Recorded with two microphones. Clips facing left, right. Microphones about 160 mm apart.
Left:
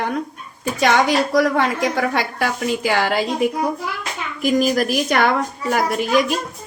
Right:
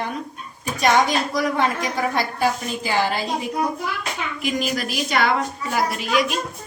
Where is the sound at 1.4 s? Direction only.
90° left.